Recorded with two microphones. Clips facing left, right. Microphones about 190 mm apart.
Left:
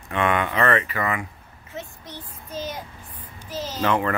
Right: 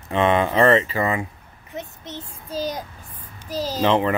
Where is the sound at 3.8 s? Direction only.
20° right (ahead or behind).